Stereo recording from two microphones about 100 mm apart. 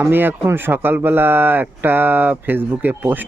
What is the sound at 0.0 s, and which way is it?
Speech, 20° right (ahead or behind).